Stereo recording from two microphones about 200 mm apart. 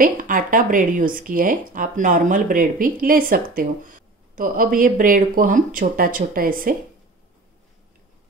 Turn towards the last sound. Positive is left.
turn(degrees=-45)  # may be behind; listen again after turning